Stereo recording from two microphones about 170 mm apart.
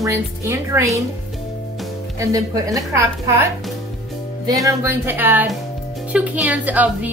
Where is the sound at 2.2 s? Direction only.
20° right (ahead or behind).